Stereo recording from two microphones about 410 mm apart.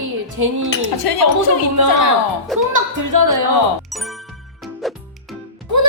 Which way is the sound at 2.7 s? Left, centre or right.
Right.